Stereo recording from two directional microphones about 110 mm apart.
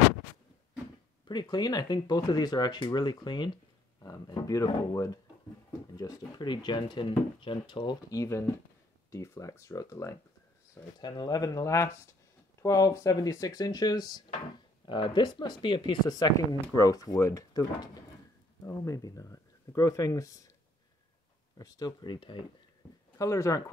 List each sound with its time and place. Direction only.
1.2 s speech: 40° left (ahead or behind)
11.0 s speech: 40° left (ahead or behind)
21.5 s speech: 35° left (ahead or behind)
23.1 s speech: 30° left (ahead or behind)